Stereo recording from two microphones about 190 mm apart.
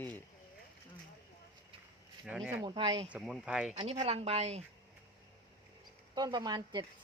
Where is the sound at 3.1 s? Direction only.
Centre (ahead or behind).